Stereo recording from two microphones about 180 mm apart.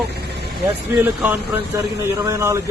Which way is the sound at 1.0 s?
10° right (ahead or behind).